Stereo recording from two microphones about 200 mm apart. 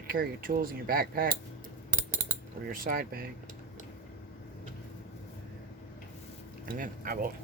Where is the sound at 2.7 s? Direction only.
45° right (ahead or behind).